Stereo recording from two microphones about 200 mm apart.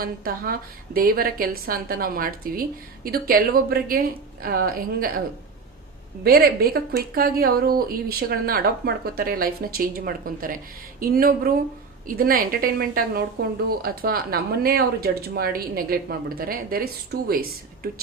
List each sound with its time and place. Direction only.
0.0 s a woman's voice: 45° right (ahead or behind)
6.2 s a woman's voice: 50° right (ahead or behind)